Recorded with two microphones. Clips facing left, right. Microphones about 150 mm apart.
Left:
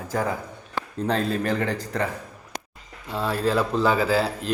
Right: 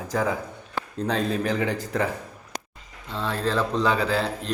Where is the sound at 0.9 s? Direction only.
5° left (ahead or behind).